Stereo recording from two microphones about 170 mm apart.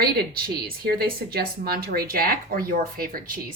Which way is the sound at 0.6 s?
65° right (ahead or behind).